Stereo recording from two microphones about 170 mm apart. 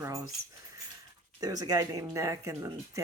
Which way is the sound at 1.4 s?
20° right (ahead or behind).